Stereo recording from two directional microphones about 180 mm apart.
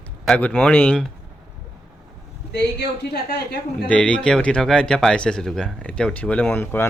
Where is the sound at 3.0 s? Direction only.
65° left (ahead or behind).